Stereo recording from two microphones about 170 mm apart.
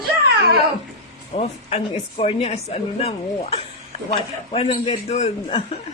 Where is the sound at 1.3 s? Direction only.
40° left (ahead or behind).